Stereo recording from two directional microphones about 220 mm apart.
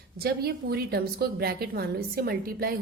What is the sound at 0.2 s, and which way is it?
A woman's voice, 45° right (ahead or behind).